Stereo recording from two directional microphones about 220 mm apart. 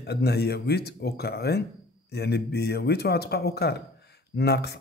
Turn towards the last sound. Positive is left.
turn(degrees=50)  # may be behind; listen again after turning